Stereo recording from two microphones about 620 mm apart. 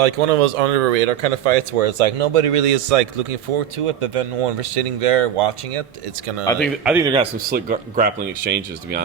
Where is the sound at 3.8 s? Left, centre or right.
Right.